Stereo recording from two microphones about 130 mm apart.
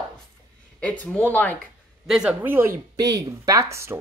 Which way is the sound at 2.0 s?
5° right (ahead or behind).